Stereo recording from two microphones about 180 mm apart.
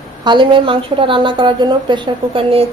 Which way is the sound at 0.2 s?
25° right (ahead or behind).